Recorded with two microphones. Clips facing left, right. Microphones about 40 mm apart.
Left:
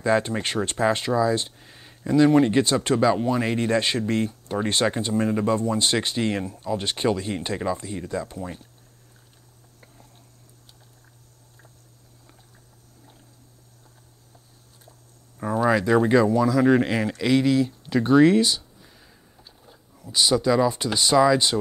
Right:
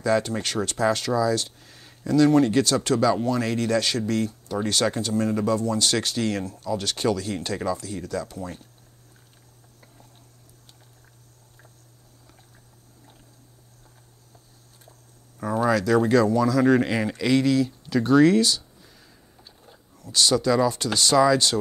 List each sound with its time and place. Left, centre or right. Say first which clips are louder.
0.0 s speech: left 1 dB; left
15.3 s speech: left 1 dB; centre
18.9 s a sound: even; centre
20.0 s speech: even; centre